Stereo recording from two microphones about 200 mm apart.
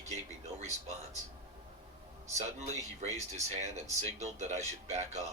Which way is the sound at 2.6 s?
35° right (ahead or behind).